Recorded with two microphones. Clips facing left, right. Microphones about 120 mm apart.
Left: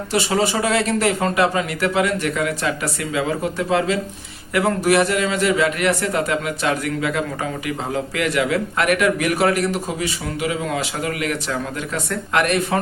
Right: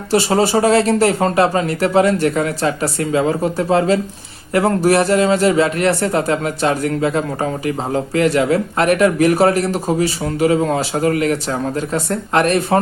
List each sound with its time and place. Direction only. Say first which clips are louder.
0.1 s a man's voice: right 6 dB; 35° right (ahead or behind)